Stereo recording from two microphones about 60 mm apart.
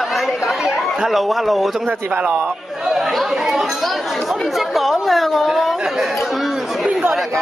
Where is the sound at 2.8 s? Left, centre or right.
Centre.